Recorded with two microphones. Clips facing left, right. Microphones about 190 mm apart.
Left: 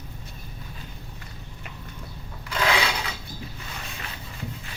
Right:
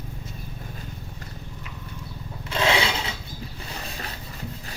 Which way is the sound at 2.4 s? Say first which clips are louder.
Right 2 dB; 25° right (ahead or behind).